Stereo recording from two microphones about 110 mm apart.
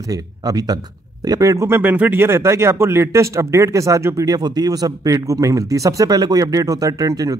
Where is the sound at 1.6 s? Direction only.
20° right (ahead or behind).